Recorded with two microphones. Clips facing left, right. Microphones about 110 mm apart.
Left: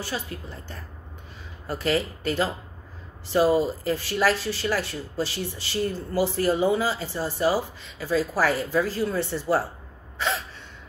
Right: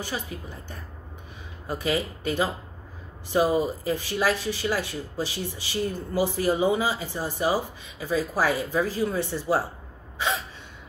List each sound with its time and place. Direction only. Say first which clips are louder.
0.0 s speech: left 1 dB; 15° right (ahead or behind)
10.1 s gasp: even; 15° right (ahead or behind)